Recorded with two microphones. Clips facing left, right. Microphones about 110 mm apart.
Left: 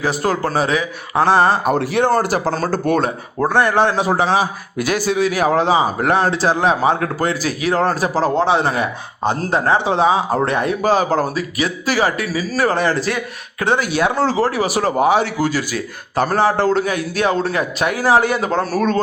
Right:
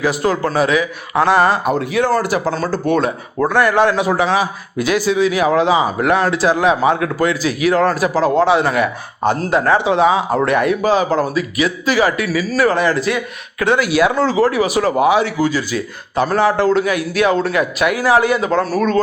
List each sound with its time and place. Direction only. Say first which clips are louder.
0.0 s a man's voice: right 2 dB; 35° left (ahead or behind)
1.7 s speech: even; 55° left (ahead or behind)
2.2 s a man's voice: right 1 dB; 40° left (ahead or behind)
4.9 s a man's voice: right 2 dB; 45° left (ahead or behind); by 10.8 s 30° left (ahead or behind)
10.8 s a man's voice: right 1 dB; 40° left (ahead or behind)